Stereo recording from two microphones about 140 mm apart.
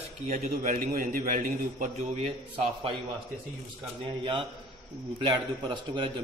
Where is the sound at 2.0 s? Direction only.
50° right (ahead or behind).